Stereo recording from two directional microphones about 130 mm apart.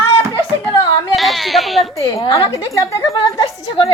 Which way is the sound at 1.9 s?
25° left (ahead or behind).